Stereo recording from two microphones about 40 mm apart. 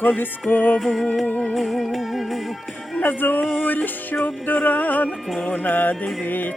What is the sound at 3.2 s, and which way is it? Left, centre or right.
Music, left.